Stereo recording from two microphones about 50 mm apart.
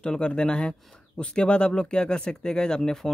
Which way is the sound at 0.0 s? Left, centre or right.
Centre.